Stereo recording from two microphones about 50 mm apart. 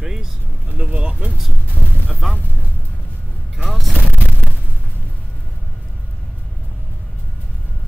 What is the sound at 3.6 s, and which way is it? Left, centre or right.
Speech, centre.